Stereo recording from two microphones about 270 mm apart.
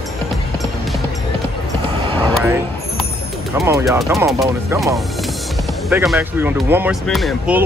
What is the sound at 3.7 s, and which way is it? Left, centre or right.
Speech, centre.